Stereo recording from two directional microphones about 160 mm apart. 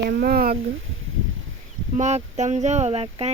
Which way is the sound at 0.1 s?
75° right (ahead or behind).